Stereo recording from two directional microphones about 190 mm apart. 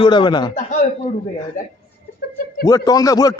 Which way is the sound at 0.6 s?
40° left (ahead or behind).